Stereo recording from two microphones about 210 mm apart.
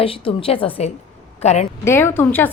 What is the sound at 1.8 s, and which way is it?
Speech, 10° left (ahead or behind).